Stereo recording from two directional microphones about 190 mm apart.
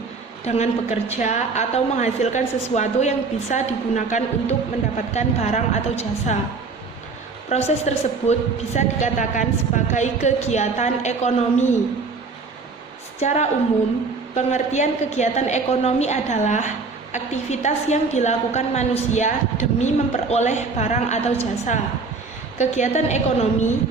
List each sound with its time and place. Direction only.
0.4 s a woman's voice: 35° left (ahead or behind)
7.5 s a woman's voice: 35° left (ahead or behind)
13.1 s a woman's voice: 35° left (ahead or behind)